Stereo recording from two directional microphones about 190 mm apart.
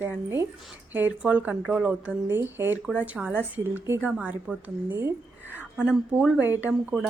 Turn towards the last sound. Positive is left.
turn(degrees=-5)  # may be behind; listen again after turning